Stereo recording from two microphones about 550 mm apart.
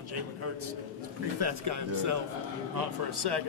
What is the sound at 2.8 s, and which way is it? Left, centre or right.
Speech, right.